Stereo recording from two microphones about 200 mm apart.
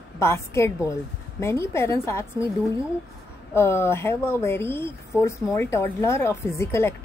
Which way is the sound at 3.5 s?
15° left (ahead or behind).